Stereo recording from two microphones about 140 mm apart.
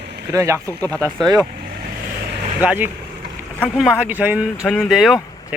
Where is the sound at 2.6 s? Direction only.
15° right (ahead or behind).